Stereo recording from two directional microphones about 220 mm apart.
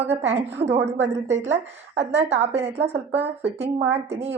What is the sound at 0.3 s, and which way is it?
A woman's voice, 30° right (ahead or behind).